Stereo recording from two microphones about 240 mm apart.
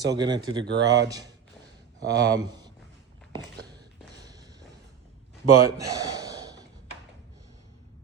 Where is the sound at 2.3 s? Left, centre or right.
Centre.